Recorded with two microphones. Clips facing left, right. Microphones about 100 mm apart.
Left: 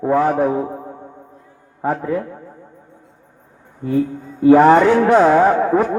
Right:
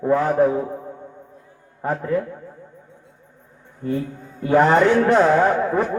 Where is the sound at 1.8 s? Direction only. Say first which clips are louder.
Left 2 dB; 15° left (ahead or behind).